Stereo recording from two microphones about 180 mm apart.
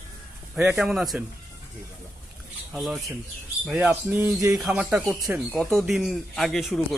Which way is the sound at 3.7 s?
10° right (ahead or behind).